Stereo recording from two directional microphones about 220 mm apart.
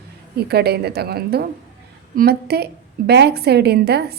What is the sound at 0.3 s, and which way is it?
A woman's voice, 45° right (ahead or behind).